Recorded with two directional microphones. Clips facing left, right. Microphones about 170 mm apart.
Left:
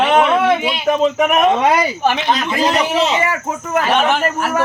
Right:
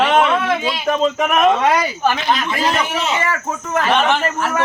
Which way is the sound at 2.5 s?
25° left (ahead or behind).